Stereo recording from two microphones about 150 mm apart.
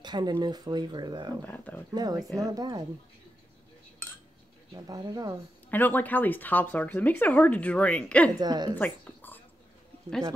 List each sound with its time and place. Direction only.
0.0 s speech: 30° right (ahead or behind)
1.4 s speech: 10° left (ahead or behind)
2.0 s speech: 25° right (ahead or behind)
4.8 s speech: 25° right (ahead or behind)
5.7 s speech: 10° left (ahead or behind)
8.4 s speech: 30° right (ahead or behind)
8.7 s a sound: 10° left (ahead or behind)